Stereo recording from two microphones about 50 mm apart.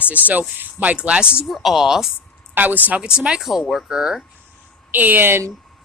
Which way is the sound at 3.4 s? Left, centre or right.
Centre.